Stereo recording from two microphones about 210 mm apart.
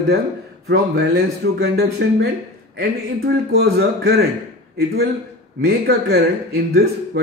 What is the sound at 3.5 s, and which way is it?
Speech, 50° right (ahead or behind).